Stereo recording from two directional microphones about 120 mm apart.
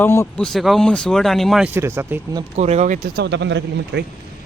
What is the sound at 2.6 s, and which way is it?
Speech, 70° right (ahead or behind).